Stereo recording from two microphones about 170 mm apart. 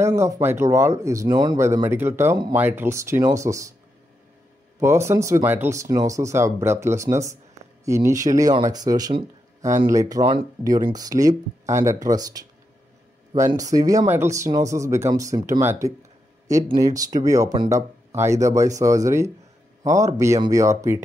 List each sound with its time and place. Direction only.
0.0 s speech: 15° right (ahead or behind)
4.7 s speech: 15° right (ahead or behind)